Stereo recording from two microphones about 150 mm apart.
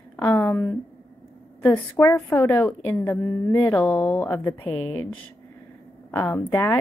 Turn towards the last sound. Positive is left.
turn(degrees=15)  # may be behind; listen again after turning